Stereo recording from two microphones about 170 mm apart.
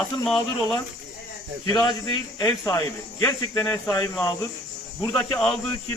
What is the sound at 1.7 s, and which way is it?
Speech, 25° left (ahead or behind).